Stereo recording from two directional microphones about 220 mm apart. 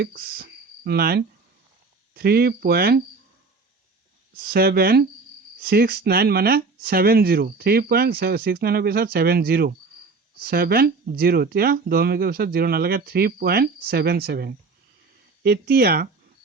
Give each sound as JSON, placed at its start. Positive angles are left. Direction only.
{"t": 0.0, "sound": "speech", "side_deg": -40}
{"t": 4.4, "sound": "speech", "side_deg": -45}